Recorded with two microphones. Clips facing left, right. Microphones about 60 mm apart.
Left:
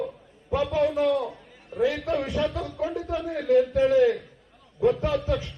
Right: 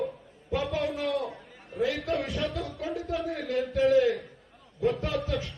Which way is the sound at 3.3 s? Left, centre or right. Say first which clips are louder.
Left 13 dB; centre.